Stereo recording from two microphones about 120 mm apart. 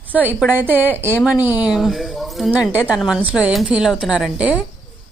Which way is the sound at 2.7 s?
15° right (ahead or behind).